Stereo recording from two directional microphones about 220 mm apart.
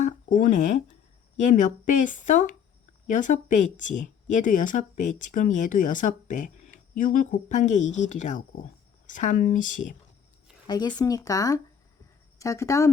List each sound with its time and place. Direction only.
0.0 s a sound: 40° left (ahead or behind)
1.4 s speech: 35° left (ahead or behind)
10.7 s speech: 20° left (ahead or behind)